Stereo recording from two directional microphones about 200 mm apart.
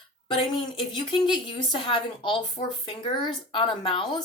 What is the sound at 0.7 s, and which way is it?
Speech, 25° left (ahead or behind).